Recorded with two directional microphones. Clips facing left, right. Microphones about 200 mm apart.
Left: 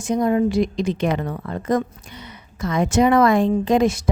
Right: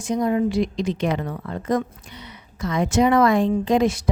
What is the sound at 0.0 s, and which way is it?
Speech, 55° left (ahead or behind).